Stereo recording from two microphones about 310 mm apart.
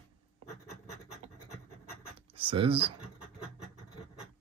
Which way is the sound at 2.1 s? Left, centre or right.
Centre.